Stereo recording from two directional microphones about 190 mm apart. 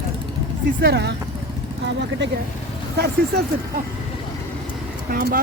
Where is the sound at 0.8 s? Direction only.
60° right (ahead or behind).